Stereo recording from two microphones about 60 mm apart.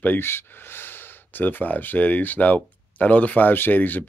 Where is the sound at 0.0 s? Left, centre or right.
Left.